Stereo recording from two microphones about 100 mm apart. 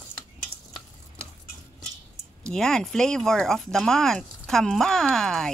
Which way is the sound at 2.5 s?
5° left (ahead or behind).